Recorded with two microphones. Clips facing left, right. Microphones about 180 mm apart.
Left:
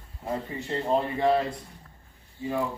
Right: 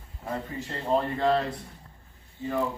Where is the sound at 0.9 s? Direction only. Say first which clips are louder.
Even; 15° left (ahead or behind).